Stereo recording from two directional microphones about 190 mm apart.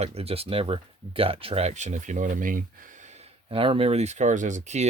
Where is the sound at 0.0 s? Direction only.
30° right (ahead or behind).